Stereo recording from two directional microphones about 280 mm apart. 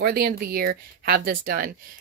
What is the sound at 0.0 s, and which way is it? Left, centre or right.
Speech, right.